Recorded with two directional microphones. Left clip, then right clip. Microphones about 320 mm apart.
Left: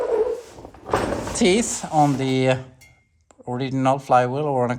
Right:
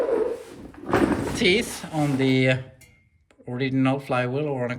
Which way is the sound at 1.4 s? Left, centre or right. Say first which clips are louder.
Left 3 dB; centre.